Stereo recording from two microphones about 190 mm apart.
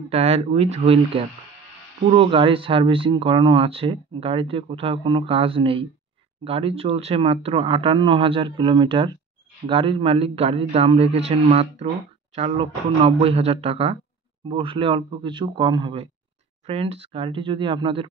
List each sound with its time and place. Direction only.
0.1 s a man's voice: 35° right (ahead or behind)